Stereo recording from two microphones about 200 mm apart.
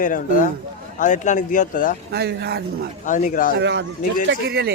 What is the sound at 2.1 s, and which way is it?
Speech, 55° right (ahead or behind).